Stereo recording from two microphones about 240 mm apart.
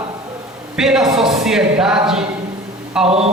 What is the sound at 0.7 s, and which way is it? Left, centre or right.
Speech, centre.